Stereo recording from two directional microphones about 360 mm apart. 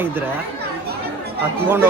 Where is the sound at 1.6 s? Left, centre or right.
Centre.